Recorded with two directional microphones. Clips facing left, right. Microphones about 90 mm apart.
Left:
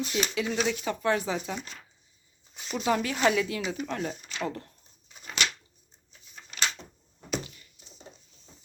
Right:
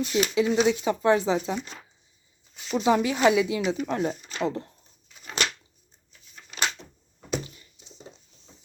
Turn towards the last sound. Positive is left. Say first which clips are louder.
# right 2 dB
turn(degrees=-25)  # may be behind; listen again after turning